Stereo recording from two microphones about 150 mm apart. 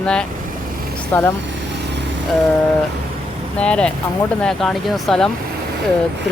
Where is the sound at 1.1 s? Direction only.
15° left (ahead or behind).